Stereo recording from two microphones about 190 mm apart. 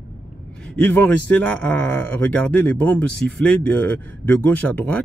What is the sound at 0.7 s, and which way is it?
Speech, 10° left (ahead or behind).